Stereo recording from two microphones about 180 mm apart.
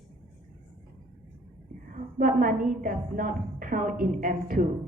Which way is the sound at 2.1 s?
50° right (ahead or behind).